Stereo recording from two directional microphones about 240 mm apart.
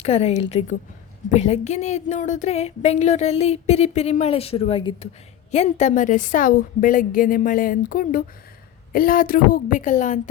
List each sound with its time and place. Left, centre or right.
0.0 s a woman's voice: left